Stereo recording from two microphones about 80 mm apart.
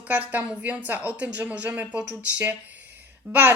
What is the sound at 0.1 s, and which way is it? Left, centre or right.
A woman's voice, right.